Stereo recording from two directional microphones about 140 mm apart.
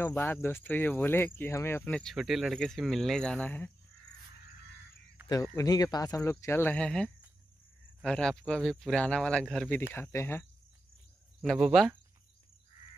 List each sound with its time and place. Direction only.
0.0 s speech: 15° left (ahead or behind)
2.1 s speech: 5° right (ahead or behind); by 3.7 s 15° left (ahead or behind)
5.3 s speech: 25° left (ahead or behind); by 9.8 s 5° left (ahead or behind)
9.9 s speech: 15° left (ahead or behind)
11.5 s speech: 5° right (ahead or behind)